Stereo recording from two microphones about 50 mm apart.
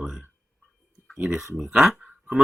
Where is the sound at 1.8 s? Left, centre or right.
Centre.